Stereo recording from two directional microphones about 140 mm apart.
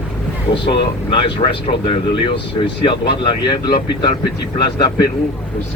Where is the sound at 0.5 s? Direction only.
35° left (ahead or behind).